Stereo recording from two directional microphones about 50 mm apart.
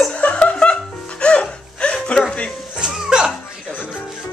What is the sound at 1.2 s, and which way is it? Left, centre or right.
Music, centre.